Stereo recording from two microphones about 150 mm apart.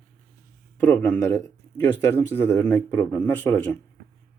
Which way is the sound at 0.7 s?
10° left (ahead or behind).